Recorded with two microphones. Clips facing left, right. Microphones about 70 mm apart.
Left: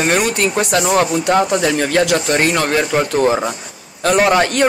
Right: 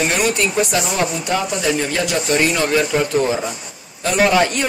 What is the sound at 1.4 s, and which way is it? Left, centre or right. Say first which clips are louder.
Speech: left 3 dB; left.